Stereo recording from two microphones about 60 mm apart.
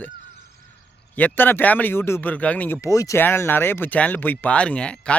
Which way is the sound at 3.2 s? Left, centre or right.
Left.